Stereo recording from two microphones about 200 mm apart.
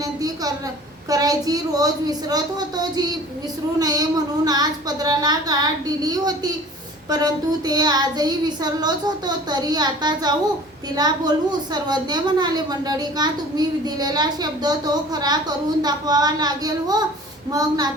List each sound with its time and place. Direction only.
0.0 s a woman's voice: 20° right (ahead or behind)